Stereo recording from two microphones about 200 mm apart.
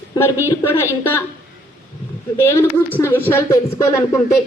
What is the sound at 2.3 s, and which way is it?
Speech, 10° left (ahead or behind).